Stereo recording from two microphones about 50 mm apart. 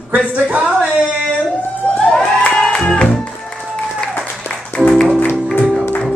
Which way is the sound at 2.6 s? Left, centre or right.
Centre.